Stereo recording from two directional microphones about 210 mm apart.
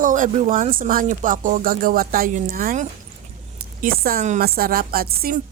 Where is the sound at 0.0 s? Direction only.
40° right (ahead or behind).